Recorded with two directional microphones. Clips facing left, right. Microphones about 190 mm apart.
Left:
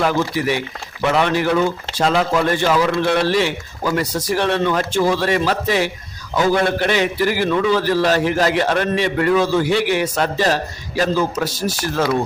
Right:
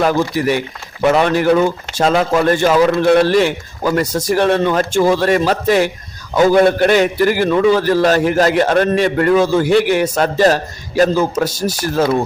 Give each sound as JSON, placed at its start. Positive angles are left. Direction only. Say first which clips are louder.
{"t": 0.0, "sound": "a man's voice", "louder": "right 3 dB", "side_deg": -45}